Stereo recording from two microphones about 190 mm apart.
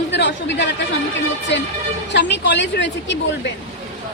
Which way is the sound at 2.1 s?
65° left (ahead or behind).